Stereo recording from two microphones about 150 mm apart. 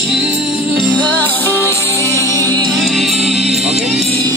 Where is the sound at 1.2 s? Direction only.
15° left (ahead or behind).